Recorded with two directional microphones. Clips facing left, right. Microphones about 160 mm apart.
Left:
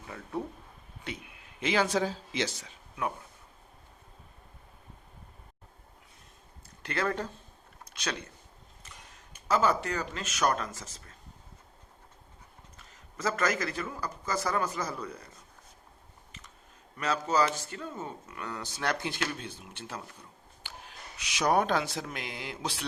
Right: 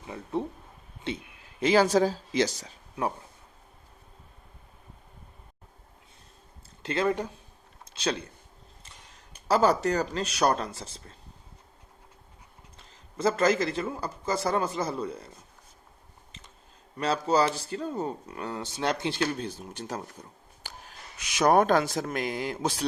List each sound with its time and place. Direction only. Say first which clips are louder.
0.0 s speech: right 4 dB; 20° right (ahead or behind)
1.6 s speech: right 6 dB; 40° right (ahead or behind)
6.8 s speech: right 5 dB; 20° right (ahead or behind)
9.3 s speech: right 4 dB; 35° right (ahead or behind)
12.7 s a man's voice: right 7 dB; 30° right (ahead or behind)
17.0 s speech: right 3 dB; 30° right (ahead or behind)
20.7 s snort: right 2 dB; 40° right (ahead or behind)
21.2 s speech: right 5 dB; 50° right (ahead or behind)